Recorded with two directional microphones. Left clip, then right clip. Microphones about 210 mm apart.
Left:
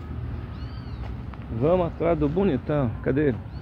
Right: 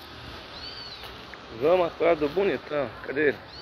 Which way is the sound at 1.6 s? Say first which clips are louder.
Right 1 dB; 10° left (ahead or behind).